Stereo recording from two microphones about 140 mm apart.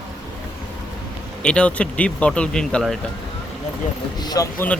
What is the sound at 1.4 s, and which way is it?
Speech, 10° left (ahead or behind).